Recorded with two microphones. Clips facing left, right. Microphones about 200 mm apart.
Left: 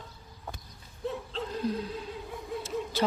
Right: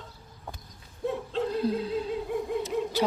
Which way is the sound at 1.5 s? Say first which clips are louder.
Right 2 dB; 30° right (ahead or behind).